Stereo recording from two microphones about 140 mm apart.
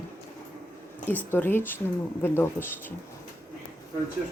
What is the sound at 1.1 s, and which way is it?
A woman's voice, 10° left (ahead or behind).